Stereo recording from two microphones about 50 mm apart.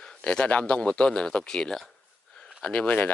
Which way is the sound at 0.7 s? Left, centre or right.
Left.